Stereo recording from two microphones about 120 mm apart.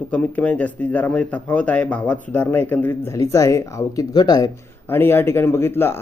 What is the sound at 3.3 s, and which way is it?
Speech, 30° left (ahead or behind).